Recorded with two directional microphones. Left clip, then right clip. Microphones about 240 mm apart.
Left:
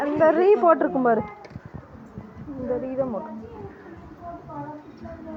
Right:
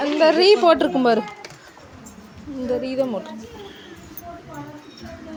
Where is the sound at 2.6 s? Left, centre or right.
Right.